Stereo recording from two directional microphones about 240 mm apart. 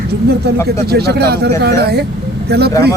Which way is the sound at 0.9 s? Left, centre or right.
Right.